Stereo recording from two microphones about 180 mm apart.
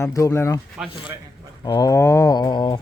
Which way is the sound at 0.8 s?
5° right (ahead or behind).